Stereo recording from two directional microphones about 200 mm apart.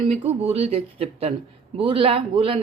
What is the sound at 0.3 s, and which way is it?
Speech, 30° right (ahead or behind).